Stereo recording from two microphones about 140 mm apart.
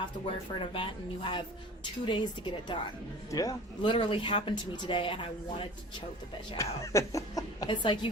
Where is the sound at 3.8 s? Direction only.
40° left (ahead or behind).